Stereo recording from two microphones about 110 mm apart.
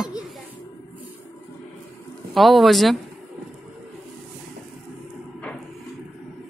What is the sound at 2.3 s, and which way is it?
Speech, centre (ahead or behind).